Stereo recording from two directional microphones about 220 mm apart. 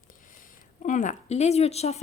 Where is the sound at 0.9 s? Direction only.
35° left (ahead or behind).